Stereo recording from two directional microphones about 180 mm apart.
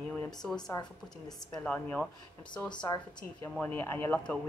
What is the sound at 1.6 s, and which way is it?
Speech, 5° left (ahead or behind).